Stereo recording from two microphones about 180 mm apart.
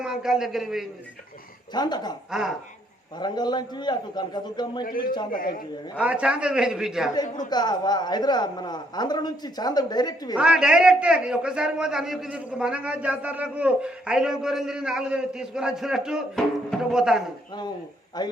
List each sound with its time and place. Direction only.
0.0 s a man's voice: 5° right (ahead or behind)
1.7 s a man's voice: 25° left (ahead or behind)
3.2 s a man's voice: 25° left (ahead or behind)
4.9 s a man's voice: 55° left (ahead or behind)
6.0 s a man's voice: 5° right (ahead or behind)
7.2 s a man's voice: 20° left (ahead or behind)
10.3 s a man's voice: 5° right (ahead or behind)
18.2 s a man's voice: 25° left (ahead or behind)